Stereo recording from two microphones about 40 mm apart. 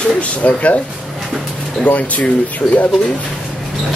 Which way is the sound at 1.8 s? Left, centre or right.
Left.